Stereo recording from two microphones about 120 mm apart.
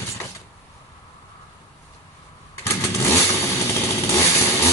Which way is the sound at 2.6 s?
20° left (ahead or behind).